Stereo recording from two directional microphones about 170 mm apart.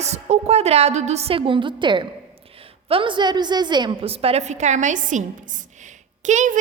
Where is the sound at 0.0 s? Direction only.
40° right (ahead or behind).